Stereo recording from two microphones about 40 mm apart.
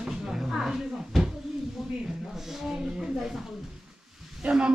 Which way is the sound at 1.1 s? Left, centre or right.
Centre.